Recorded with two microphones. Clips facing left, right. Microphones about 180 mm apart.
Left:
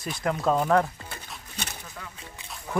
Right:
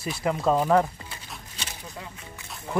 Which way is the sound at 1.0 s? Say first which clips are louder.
Left 1 dB; 55° left (ahead or behind).